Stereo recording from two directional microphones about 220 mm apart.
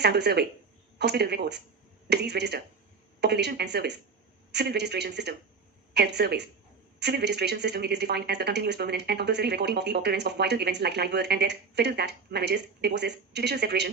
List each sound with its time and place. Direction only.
0.0 s speech: 50° right (ahead or behind)